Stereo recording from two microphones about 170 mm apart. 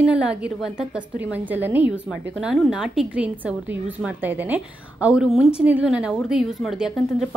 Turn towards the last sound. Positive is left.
turn(degrees=0)  # may be behind; listen again after turning